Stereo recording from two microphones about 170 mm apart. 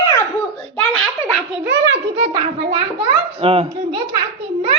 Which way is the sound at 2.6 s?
40° right (ahead or behind).